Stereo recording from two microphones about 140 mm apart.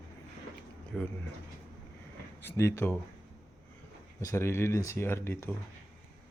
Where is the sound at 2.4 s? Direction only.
20° left (ahead or behind).